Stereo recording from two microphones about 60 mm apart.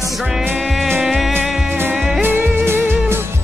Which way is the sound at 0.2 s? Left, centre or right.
Centre.